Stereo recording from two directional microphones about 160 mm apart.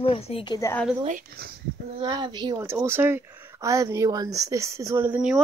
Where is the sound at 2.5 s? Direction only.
15° right (ahead or behind).